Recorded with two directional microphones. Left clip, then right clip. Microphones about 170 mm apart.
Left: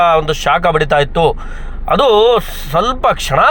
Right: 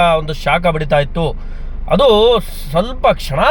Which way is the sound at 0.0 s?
Centre (ahead or behind).